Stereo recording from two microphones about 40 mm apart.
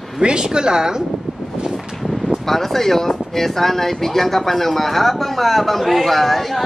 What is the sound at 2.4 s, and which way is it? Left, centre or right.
Speech, centre.